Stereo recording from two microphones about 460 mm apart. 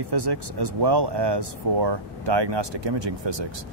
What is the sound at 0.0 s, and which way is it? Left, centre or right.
Speech, right.